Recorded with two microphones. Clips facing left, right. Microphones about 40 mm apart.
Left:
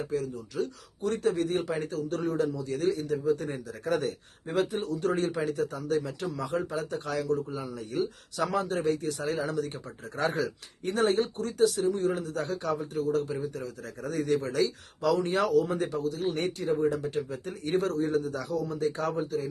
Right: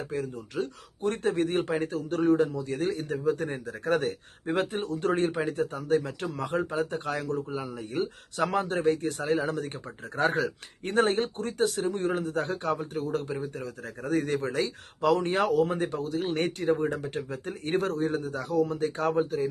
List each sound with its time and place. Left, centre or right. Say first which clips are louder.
0.1 s speech: left 1 dB; right
19.1 s speech: right 4 dB; right